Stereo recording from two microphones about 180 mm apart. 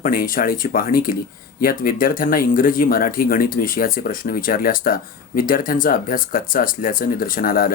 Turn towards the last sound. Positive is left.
turn(degrees=50)  # may be behind; listen again after turning